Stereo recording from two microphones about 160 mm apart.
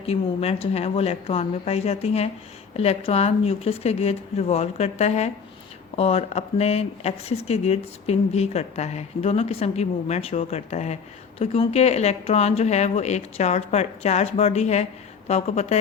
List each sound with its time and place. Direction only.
0.0 s speech: 40° left (ahead or behind)